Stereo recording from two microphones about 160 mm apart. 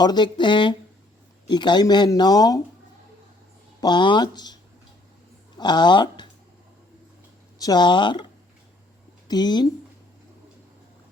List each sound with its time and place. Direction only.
0.0 s speech: 25° left (ahead or behind)
3.8 s speech: 25° left (ahead or behind)
5.5 s speech: 25° left (ahead or behind)
7.6 s speech: 25° left (ahead or behind)